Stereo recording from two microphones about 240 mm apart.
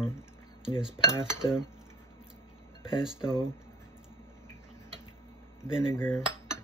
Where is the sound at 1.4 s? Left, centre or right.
Centre.